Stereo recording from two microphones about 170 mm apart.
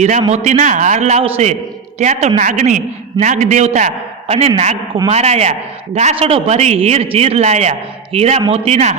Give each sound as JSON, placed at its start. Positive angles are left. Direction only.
{"t": 0.3, "sound": "a man's voice", "side_deg": -40}